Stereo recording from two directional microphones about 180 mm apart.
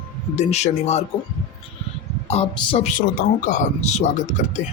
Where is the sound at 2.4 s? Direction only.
35° left (ahead or behind).